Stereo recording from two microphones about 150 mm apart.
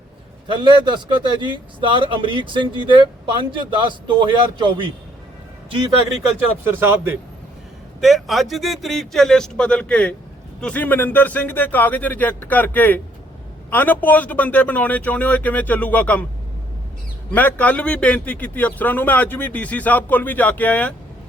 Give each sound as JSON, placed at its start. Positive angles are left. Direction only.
{"t": 0.4, "sound": "a man's voice", "side_deg": -30}
{"t": 6.7, "sound": "speech", "side_deg": -15}
{"t": 8.0, "sound": "speech", "side_deg": 0}
{"t": 17.3, "sound": "speech", "side_deg": 10}